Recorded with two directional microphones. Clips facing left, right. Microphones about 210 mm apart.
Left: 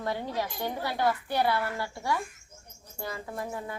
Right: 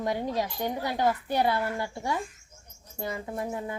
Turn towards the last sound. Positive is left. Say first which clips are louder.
# right 3 dB
turn(degrees=-20)  # may be behind; listen again after turning